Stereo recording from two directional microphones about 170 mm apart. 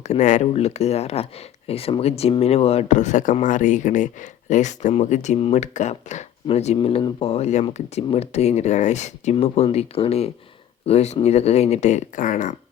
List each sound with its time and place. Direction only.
0.0 s speech: 45° left (ahead or behind)